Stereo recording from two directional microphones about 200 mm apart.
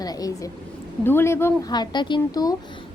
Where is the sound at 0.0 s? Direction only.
20° left (ahead or behind).